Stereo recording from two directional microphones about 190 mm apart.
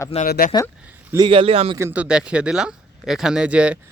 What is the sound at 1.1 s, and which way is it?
Speech, 25° right (ahead or behind).